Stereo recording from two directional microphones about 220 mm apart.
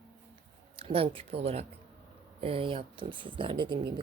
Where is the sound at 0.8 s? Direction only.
25° right (ahead or behind).